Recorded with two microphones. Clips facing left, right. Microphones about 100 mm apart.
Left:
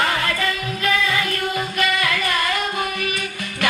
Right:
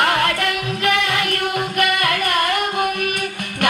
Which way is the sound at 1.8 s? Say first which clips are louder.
Right 2 dB; 55° right (ahead or behind).